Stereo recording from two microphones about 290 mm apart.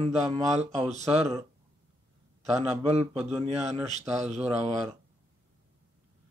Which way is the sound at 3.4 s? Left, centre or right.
Right.